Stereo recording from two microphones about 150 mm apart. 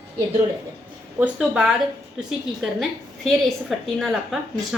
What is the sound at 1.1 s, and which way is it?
A woman's voice, 5° right (ahead or behind).